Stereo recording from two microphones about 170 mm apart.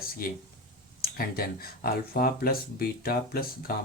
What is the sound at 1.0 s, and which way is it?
Speech, 60° left (ahead or behind).